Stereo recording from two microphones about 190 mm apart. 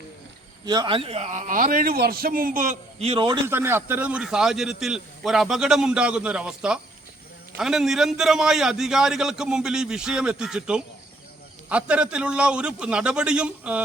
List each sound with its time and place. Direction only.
0.6 s a man's voice: 20° right (ahead or behind)
3.4 s a man's voice: 10° right (ahead or behind)